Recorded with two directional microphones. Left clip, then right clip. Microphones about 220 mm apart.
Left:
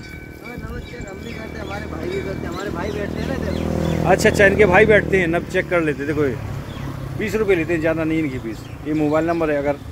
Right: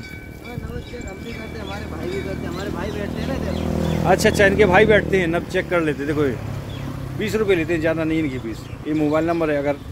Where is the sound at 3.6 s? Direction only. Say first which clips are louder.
Left 1 dB; 35° left (ahead or behind).